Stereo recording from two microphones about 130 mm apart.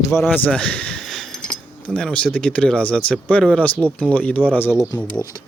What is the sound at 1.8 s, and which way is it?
Speech, 10° left (ahead or behind).